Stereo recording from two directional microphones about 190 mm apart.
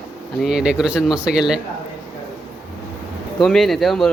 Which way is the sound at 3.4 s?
Centre (ahead or behind).